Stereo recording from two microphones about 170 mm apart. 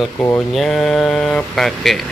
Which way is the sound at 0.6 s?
Centre (ahead or behind).